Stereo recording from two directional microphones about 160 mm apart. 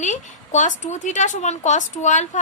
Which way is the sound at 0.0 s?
50° left (ahead or behind).